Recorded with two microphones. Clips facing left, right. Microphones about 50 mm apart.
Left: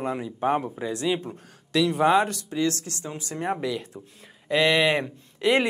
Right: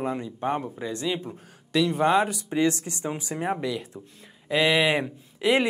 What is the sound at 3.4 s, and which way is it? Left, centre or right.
Speech, centre.